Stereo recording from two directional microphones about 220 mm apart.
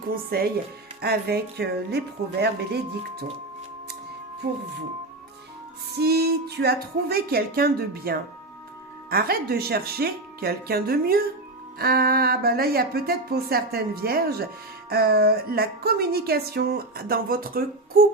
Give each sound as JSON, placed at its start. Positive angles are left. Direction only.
{"t": 0.1, "sound": "speech", "side_deg": -45}
{"t": 6.0, "sound": "speech", "side_deg": -45}